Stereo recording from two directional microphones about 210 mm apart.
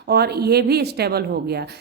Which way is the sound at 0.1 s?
50° right (ahead or behind).